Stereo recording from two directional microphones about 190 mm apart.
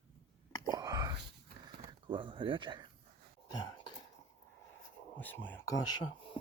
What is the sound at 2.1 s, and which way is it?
Speech, 25° right (ahead or behind).